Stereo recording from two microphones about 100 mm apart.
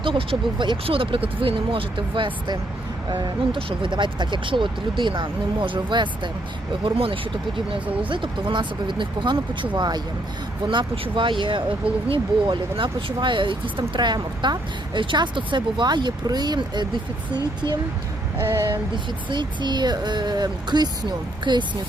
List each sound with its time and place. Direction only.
0.0 s speech: 60° right (ahead or behind)
6.8 s speech: 65° right (ahead or behind); by 10.0 s 45° right (ahead or behind)
10.7 s speech: 60° right (ahead or behind)
18.3 s a sound: 25° right (ahead or behind)
19.3 s speech: 50° right (ahead or behind)